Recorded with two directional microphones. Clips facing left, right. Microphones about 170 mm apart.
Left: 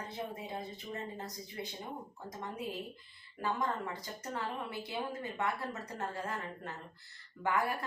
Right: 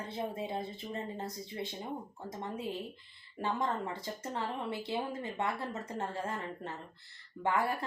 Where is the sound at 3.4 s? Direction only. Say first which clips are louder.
Right 1 dB; 25° right (ahead or behind).